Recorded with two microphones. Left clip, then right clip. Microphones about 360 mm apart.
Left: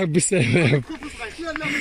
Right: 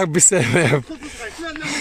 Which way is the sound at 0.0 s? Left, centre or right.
Centre.